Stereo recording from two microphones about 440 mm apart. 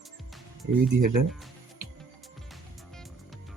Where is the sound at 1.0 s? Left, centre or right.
Right.